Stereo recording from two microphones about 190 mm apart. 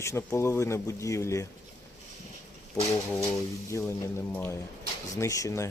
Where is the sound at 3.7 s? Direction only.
10° left (ahead or behind).